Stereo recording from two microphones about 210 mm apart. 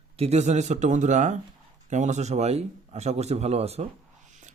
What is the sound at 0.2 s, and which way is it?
Speech, 30° right (ahead or behind).